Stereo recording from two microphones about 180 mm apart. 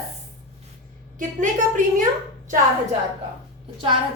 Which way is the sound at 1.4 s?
45° right (ahead or behind).